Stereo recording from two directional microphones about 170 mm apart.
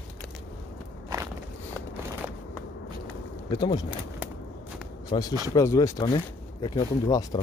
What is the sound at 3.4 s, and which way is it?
Speech, 25° left (ahead or behind).